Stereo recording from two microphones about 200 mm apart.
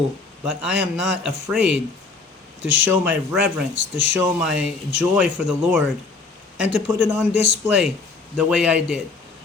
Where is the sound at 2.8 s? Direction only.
10° right (ahead or behind).